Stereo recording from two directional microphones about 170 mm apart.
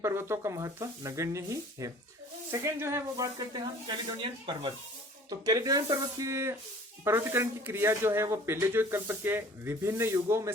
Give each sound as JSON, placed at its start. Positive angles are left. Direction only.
{"t": 0.0, "sound": "speech", "side_deg": -15}